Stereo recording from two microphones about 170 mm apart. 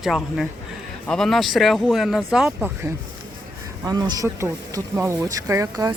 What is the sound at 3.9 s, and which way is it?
Speech, 20° right (ahead or behind).